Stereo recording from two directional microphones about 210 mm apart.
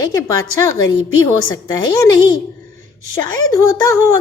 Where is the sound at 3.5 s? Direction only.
15° left (ahead or behind).